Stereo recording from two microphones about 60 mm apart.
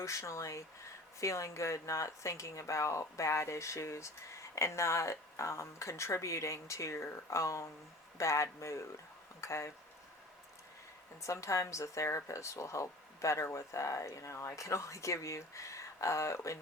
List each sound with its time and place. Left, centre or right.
0.0 s speech: left
11.2 s speech: left